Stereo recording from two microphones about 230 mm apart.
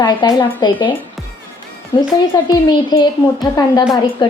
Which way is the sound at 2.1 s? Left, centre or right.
Centre.